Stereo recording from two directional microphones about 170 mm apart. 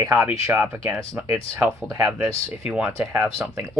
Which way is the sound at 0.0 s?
15° right (ahead or behind).